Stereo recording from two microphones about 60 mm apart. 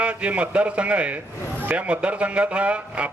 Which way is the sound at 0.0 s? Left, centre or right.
Right.